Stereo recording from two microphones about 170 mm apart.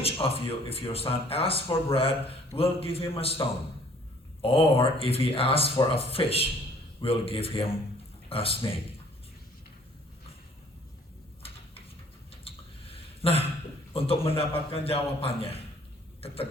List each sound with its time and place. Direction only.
0.0 s speech: 35° left (ahead or behind)
12.3 s chewing: 35° left (ahead or behind)
13.9 s speech: 35° left (ahead or behind)